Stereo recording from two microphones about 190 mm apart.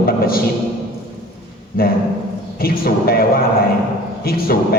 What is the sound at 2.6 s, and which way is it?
Speech, 50° left (ahead or behind).